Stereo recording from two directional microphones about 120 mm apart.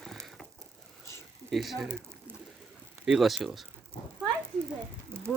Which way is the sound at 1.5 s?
Centre (ahead or behind).